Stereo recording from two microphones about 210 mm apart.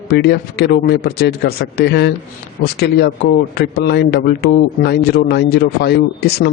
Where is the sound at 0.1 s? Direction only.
50° left (ahead or behind).